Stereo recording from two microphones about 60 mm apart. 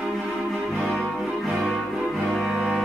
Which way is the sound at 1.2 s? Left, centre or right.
Centre.